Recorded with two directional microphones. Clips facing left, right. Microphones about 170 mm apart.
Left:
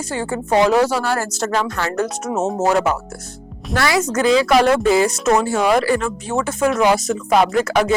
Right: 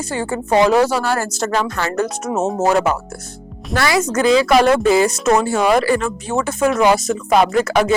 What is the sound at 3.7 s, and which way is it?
Music, 15° right (ahead or behind).